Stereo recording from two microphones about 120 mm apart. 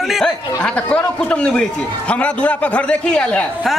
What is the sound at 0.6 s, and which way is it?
A man's voice, 10° left (ahead or behind).